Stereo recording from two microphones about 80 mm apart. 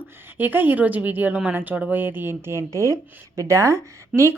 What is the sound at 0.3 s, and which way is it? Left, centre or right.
A woman's voice, right.